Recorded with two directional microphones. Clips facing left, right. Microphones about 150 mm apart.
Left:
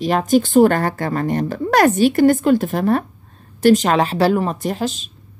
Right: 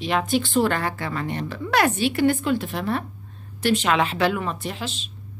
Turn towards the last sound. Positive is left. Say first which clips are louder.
# left 9 dB
turn(degrees=45)  # may be behind; listen again after turning